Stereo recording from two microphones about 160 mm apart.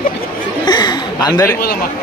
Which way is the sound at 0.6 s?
25° left (ahead or behind).